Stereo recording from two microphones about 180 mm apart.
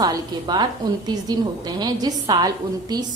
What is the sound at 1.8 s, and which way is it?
A woman's voice, 20° right (ahead or behind).